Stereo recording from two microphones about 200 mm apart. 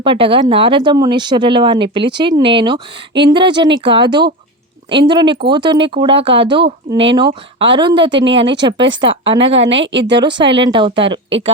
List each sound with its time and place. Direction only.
0.0 s speech: 25° right (ahead or behind)
9.6 s a woman's voice: 65° right (ahead or behind)
10.2 s speech: 25° right (ahead or behind)